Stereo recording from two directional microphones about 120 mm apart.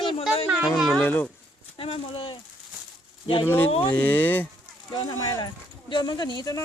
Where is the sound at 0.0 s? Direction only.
45° left (ahead or behind).